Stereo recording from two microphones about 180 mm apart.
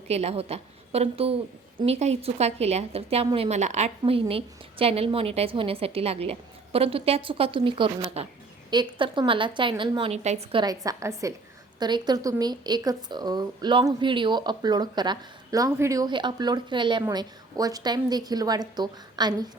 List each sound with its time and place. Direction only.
0.1 s a woman's voice: 35° right (ahead or behind)